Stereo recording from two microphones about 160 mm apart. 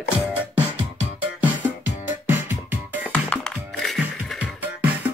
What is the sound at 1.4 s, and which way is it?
Music, 10° right (ahead or behind).